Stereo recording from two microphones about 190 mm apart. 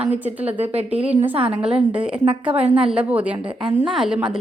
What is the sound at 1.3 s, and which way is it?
Speech, 30° right (ahead or behind).